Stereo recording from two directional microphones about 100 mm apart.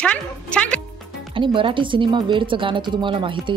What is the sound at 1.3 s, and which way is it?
Speech, 55° right (ahead or behind).